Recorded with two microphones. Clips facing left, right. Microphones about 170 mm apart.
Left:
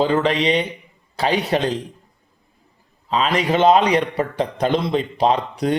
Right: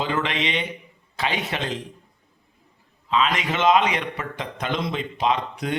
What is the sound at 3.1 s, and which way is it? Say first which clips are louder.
A man's voice: left 4 dB; 35° left (ahead or behind).